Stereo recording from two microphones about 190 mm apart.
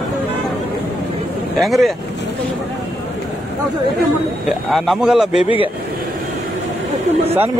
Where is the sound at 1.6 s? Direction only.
Centre (ahead or behind).